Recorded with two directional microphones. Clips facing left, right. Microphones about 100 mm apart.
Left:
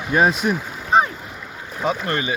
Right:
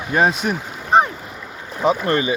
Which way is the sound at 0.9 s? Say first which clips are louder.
Right 2 dB; 35° right (ahead or behind).